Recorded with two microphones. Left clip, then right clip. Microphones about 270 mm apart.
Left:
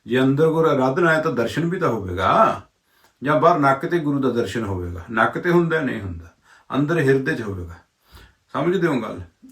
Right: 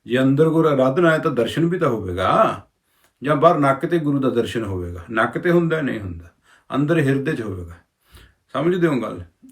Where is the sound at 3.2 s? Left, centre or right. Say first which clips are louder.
Right 1 dB; centre.